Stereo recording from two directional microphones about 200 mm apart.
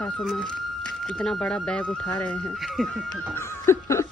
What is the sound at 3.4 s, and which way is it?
Speech, 15° left (ahead or behind).